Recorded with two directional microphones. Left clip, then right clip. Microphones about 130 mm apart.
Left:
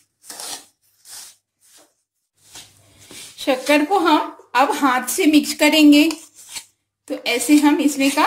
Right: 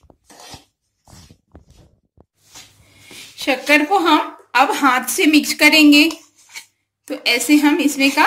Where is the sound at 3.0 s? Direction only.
45° left (ahead or behind).